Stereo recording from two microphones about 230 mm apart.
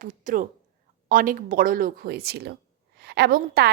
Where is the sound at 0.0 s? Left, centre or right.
Right.